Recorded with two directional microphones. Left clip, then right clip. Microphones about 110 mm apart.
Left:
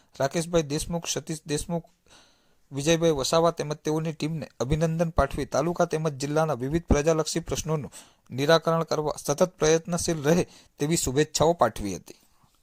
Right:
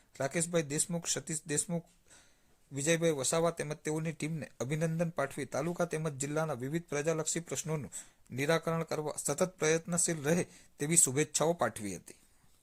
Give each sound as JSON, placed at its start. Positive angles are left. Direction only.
{"t": 0.2, "sound": "speech", "side_deg": 40}
{"t": 11.6, "sound": "speech", "side_deg": 50}